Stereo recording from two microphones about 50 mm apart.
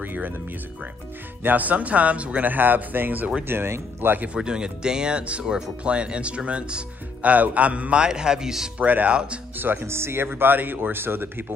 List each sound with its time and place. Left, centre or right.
0.0 s speech: right
1.4 s speech: right
3.4 s speech: right
4.4 s speech: centre
8.7 s speech: right
9.6 s speech: right